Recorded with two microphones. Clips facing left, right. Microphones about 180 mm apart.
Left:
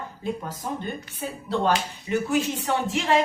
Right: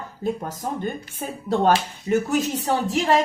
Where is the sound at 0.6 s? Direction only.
50° right (ahead or behind).